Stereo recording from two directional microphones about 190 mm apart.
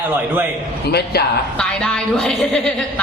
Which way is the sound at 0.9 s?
60° left (ahead or behind).